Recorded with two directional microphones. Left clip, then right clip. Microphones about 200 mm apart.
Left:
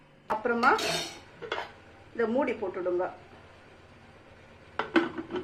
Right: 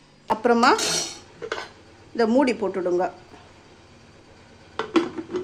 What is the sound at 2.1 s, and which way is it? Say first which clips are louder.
Speech: right 8 dB; 55° right (ahead or behind).